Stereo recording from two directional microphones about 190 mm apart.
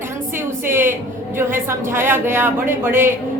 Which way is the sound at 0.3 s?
10° right (ahead or behind).